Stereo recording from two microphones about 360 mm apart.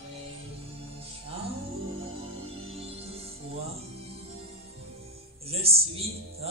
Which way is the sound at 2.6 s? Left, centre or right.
Centre.